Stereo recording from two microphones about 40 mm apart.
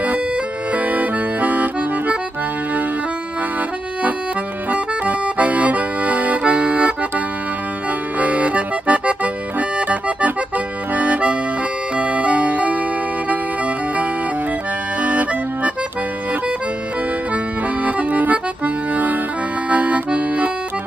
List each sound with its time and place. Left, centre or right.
0.7 s accordion: right
4.6 s accordion: right
8.2 s accordion: right
12.0 s music: right
15.0 s accordion: right
17.8 s accordion: right
19.7 s accordion: right